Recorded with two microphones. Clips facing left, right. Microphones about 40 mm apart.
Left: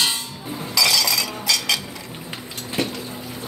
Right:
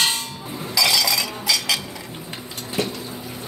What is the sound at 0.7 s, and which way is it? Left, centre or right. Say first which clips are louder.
Chink: even; centre.